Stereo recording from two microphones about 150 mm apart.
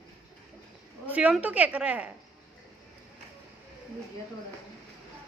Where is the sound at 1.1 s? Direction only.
10° right (ahead or behind).